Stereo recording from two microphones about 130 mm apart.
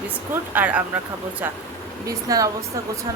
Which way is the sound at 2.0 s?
25° right (ahead or behind).